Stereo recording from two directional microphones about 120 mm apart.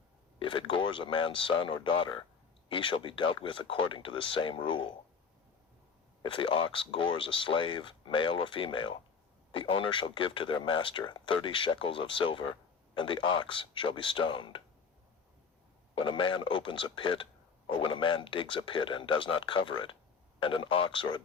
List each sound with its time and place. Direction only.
0.3 s speech: 45° left (ahead or behind)
6.2 s speech: 45° left (ahead or behind)
16.0 s speech: 45° left (ahead or behind)